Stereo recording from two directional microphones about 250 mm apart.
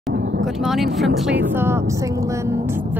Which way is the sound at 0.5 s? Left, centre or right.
Centre.